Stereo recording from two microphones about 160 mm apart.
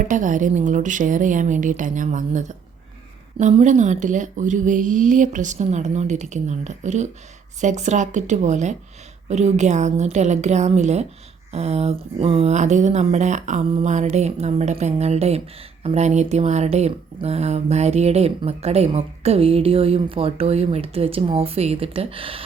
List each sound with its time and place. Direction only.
0.1 s speech: 50° right (ahead or behind); by 22.4 s 35° right (ahead or behind)